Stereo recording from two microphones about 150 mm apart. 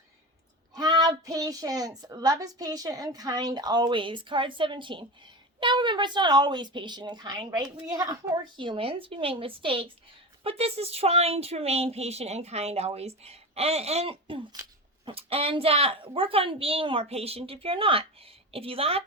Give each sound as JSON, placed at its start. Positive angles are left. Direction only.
{"t": 0.7, "sound": "a woman's voice", "side_deg": -25}
{"t": 8.5, "sound": "a woman's voice", "side_deg": -35}